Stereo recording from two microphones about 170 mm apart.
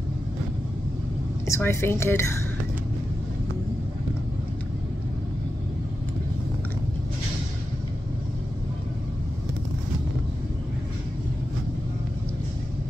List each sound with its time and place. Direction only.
1.5 s a woman's voice: 15° left (ahead or behind)